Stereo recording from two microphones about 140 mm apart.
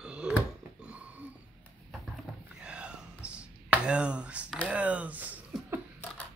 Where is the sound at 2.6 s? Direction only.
5° right (ahead or behind).